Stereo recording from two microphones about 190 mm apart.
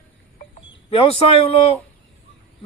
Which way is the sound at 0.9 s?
30° left (ahead or behind).